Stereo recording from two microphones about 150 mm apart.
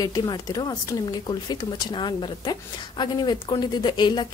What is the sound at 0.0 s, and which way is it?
A woman's voice, 25° left (ahead or behind).